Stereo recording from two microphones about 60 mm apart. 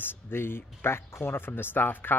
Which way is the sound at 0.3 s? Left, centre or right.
Left.